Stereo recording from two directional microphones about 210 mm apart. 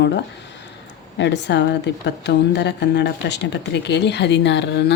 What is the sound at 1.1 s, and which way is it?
A woman's voice, 55° left (ahead or behind).